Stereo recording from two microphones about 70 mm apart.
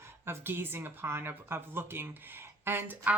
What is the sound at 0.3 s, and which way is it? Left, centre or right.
Speech, right.